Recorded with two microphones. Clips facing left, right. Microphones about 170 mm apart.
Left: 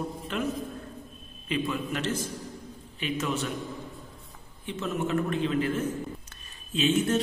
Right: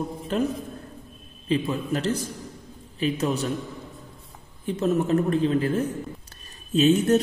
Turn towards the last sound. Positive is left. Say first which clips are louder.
# right 6 dB
turn(degrees=-40)  # may be behind; listen again after turning